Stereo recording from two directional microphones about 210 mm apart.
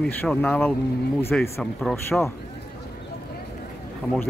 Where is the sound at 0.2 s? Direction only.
5° left (ahead or behind).